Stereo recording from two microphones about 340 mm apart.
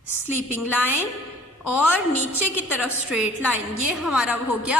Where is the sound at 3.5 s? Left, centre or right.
Left.